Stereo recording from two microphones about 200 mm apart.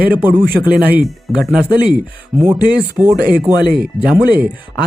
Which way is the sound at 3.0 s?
10° right (ahead or behind).